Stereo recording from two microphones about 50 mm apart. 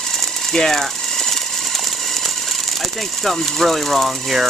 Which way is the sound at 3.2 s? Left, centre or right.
Centre.